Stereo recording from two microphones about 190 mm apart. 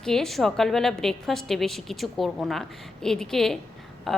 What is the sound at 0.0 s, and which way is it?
A woman's voice, 5° left (ahead or behind).